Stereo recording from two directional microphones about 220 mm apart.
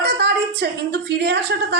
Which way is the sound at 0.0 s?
45° right (ahead or behind).